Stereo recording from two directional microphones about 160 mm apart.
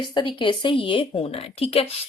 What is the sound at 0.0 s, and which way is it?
A woman's voice, 30° left (ahead or behind).